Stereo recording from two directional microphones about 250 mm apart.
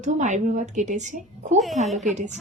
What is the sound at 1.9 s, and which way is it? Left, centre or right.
Speech, centre.